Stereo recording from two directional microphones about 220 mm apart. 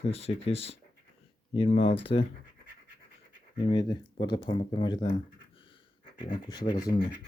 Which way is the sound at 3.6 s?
20° left (ahead or behind).